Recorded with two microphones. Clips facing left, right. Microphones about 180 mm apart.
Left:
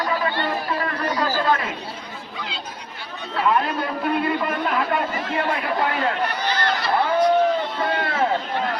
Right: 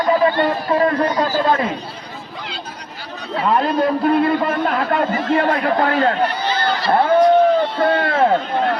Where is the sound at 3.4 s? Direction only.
35° right (ahead or behind).